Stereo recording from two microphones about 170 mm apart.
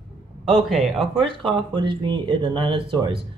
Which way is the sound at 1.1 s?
30° right (ahead or behind).